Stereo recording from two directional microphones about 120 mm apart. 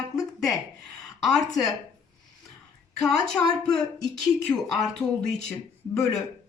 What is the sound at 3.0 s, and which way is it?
Speech, 5° left (ahead or behind).